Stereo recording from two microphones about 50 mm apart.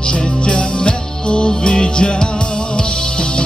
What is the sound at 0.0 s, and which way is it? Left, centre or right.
Music, centre.